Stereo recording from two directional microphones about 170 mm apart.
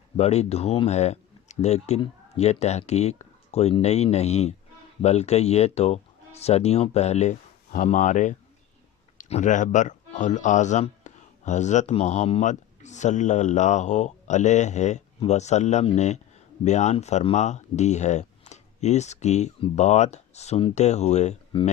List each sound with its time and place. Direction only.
0.2 s speech: 40° left (ahead or behind)